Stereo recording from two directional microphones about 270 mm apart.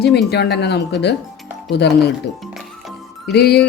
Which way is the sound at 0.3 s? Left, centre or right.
Left.